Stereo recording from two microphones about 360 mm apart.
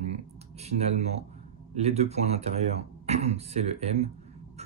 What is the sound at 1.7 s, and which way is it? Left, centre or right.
Speech, centre.